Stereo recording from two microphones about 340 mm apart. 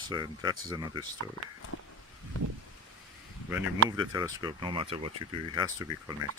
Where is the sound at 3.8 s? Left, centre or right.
Centre.